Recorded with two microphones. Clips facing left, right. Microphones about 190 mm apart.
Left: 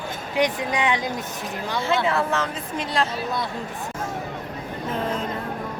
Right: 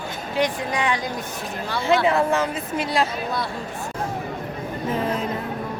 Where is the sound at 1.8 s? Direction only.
15° right (ahead or behind).